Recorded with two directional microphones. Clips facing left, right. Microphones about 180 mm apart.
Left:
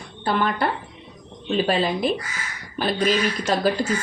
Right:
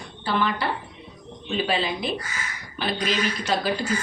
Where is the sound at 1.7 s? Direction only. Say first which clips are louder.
Left 5 dB; 45° left (ahead or behind).